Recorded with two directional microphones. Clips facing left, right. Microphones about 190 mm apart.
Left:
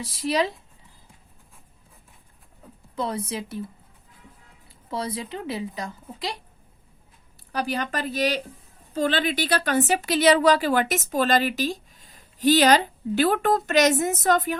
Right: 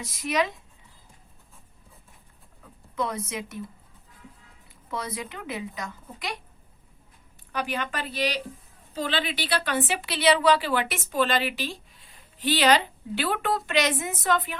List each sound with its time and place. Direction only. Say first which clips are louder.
0.0 s a woman's voice: left 3 dB; 30° left (ahead or behind)
2.9 s a woman's voice: left 2 dB; 30° left (ahead or behind)
4.7 s speech: left 4 dB; 30° left (ahead or behind)
7.5 s a woman's voice: left 3 dB; 35° left (ahead or behind)